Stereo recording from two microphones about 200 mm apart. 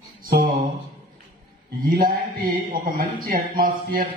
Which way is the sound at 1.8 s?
45° right (ahead or behind).